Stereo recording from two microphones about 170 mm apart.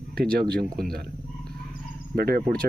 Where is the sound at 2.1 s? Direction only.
60° right (ahead or behind).